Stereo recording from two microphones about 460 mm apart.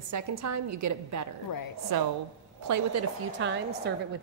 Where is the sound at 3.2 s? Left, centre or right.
Right.